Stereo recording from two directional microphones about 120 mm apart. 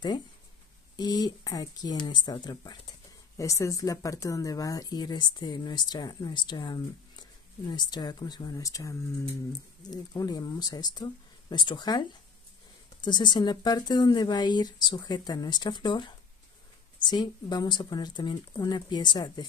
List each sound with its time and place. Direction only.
0.9 s speech: 35° left (ahead or behind)